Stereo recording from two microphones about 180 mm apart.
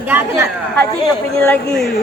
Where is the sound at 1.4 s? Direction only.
5° left (ahead or behind).